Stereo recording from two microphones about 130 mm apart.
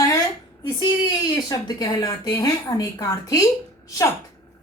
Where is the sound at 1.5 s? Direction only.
30° left (ahead or behind).